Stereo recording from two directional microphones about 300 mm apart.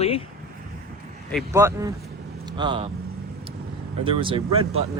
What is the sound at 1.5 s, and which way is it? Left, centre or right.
Speech, centre.